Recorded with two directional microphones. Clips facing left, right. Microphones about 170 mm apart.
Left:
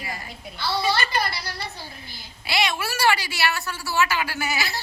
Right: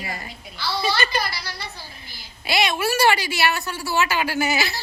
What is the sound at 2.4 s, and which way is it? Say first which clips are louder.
A woman's voice: right 4 dB; 20° right (ahead or behind).